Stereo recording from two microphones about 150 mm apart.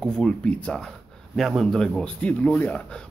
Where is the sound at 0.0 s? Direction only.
5° left (ahead or behind).